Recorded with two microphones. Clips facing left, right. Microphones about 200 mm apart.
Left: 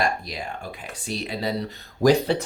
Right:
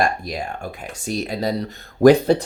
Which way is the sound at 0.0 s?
50° right (ahead or behind).